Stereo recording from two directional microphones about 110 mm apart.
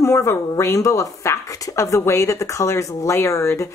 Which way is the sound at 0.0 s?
25° left (ahead or behind).